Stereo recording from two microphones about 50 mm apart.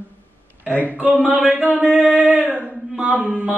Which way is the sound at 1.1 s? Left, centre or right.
Right.